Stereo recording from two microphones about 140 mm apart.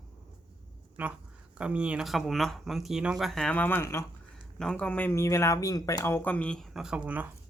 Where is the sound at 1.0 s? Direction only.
15° right (ahead or behind); by 4.1 s 20° left (ahead or behind).